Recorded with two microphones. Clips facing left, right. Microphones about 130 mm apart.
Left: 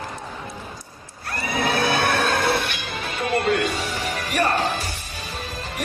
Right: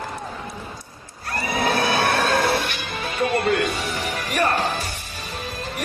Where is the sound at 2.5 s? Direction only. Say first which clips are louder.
Right 1 dB; 55° left (ahead or behind).